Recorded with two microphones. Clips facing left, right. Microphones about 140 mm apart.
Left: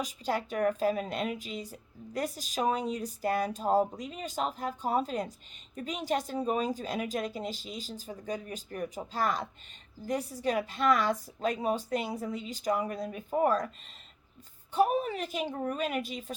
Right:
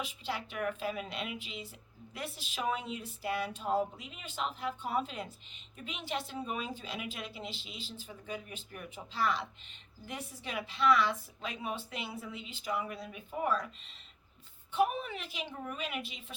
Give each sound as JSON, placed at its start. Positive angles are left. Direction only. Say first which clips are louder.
{"t": 0.0, "sound": "a woman's voice", "louder": "left 6 dB", "side_deg": 40}
{"t": 14.7, "sound": "a woman's voice", "louder": "left 4 dB", "side_deg": 40}